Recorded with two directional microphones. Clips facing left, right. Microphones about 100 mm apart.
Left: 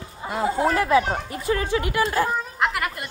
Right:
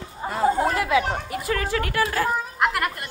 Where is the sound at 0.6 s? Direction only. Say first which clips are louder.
Left 2 dB; 35° left (ahead or behind); by 2.0 s 20° left (ahead or behind).